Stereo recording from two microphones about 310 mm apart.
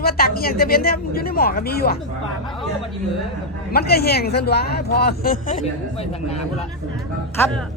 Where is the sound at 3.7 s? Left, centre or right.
Left.